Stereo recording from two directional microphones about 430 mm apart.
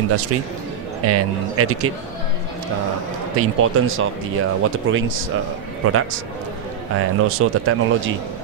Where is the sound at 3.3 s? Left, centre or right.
Right.